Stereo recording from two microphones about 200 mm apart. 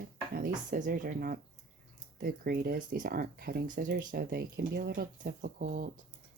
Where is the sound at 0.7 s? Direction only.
45° right (ahead or behind).